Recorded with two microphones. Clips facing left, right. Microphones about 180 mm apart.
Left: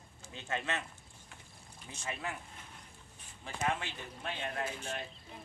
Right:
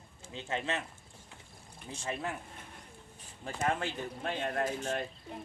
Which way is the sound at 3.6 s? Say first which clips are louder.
Right 3 dB; 45° right (ahead or behind).